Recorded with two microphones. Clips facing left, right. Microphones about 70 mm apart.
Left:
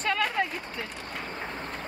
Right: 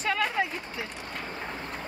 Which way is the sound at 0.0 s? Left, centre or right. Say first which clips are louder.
Even; centre.